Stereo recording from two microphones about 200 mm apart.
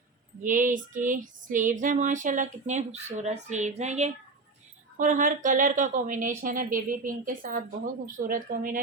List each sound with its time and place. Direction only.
0.4 s female singing: 40° right (ahead or behind)
8.2 s speech: 40° right (ahead or behind)